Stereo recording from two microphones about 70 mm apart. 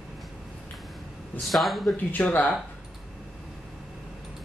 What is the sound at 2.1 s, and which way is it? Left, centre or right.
Speech, left.